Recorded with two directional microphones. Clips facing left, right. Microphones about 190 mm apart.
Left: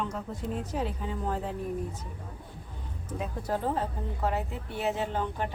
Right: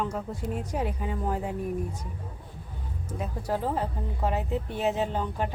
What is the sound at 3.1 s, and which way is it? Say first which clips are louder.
Speech: right 1 dB; 10° right (ahead or behind).